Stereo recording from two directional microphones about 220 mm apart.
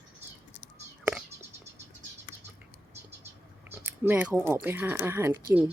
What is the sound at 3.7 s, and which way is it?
Speech, 10° right (ahead or behind).